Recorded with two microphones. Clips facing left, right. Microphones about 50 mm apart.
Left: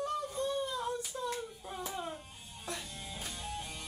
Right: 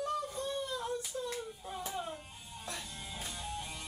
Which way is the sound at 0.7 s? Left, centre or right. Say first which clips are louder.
Left 1 dB; left.